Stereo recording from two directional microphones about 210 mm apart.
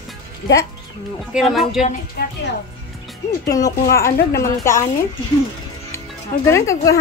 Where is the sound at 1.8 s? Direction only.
35° left (ahead or behind).